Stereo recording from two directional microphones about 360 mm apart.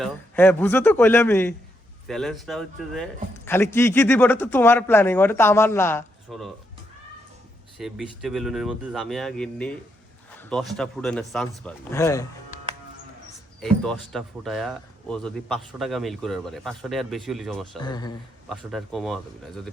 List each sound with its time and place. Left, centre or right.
0.0 s a man's voice: centre
7.8 s a man's voice: centre
13.6 s a man's voice: centre
17.8 s speech: centre
18.4 s a man's voice: centre